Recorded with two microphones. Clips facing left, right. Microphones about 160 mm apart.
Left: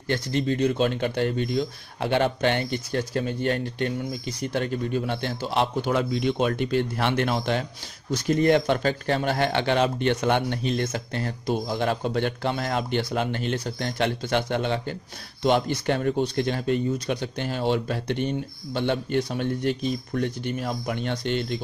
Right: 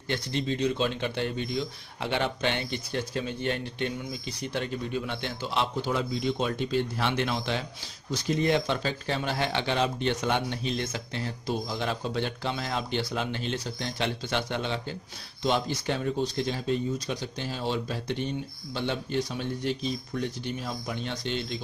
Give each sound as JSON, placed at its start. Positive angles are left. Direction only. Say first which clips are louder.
{"t": 0.1, "sound": "a man's voice", "louder": "left 5 dB", "side_deg": 50}